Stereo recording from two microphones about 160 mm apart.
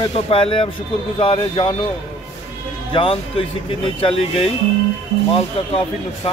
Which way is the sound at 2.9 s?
35° left (ahead or behind).